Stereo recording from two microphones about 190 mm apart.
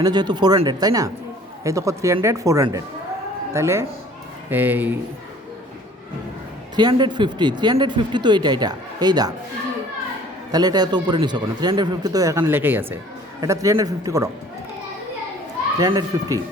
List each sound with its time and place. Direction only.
0.0 s a man's voice: 20° right (ahead or behind)
6.7 s speech: 25° right (ahead or behind)
10.5 s a man's voice: 20° right (ahead or behind)
15.8 s speech: 20° right (ahead or behind)